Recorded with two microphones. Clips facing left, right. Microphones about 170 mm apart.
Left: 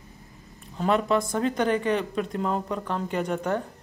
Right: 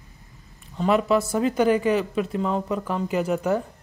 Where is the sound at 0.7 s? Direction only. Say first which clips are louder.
Right 3 dB; 5° right (ahead or behind).